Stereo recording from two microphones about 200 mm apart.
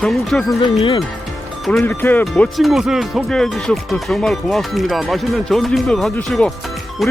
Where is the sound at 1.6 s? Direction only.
Centre (ahead or behind).